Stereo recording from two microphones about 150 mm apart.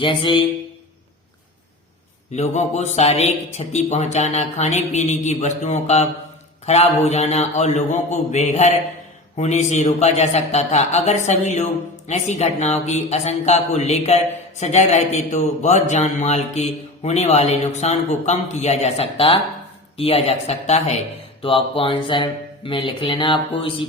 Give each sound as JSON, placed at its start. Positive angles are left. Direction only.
{"t": 0.0, "sound": "speech", "side_deg": 30}
{"t": 2.3, "sound": "a man's voice", "side_deg": 50}
{"t": 21.4, "sound": "speech", "side_deg": 35}